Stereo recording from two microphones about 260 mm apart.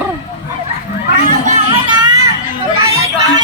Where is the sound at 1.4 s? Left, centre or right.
Centre.